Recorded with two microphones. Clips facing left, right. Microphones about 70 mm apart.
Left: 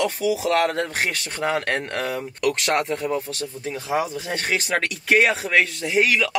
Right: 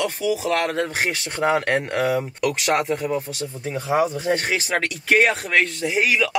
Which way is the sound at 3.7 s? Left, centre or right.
Right.